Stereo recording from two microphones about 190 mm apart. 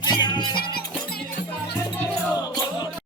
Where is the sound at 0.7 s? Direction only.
55° left (ahead or behind).